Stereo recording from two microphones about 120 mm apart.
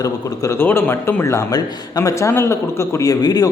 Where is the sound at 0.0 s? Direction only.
30° left (ahead or behind).